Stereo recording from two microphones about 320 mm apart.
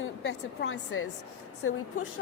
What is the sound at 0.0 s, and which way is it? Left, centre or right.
A woman's voice, left.